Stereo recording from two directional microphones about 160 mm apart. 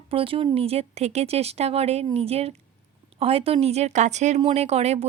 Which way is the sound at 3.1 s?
40° right (ahead or behind).